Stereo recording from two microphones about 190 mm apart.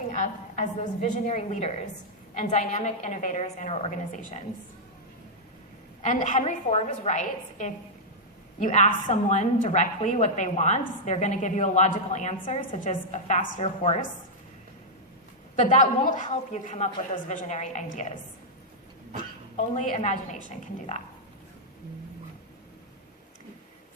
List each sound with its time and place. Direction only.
0.1 s a woman's voice: 40° left (ahead or behind)
6.0 s a woman's voice: 40° left (ahead or behind)
15.5 s a woman's voice: 40° left (ahead or behind)
19.7 s a woman's voice: 40° left (ahead or behind)